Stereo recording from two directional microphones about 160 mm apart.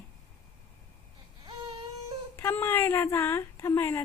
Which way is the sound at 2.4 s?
15° left (ahead or behind).